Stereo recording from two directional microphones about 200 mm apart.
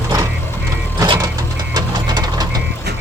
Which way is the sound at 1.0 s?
15° right (ahead or behind).